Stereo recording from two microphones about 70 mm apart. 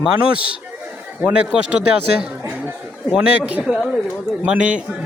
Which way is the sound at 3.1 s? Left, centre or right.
Centre.